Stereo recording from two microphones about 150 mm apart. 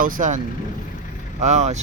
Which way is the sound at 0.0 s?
65° right (ahead or behind).